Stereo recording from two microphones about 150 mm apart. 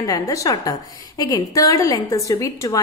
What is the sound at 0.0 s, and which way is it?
A woman's voice, 25° left (ahead or behind).